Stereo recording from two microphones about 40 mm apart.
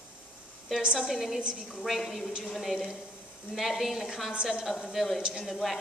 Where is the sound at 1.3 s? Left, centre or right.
Right.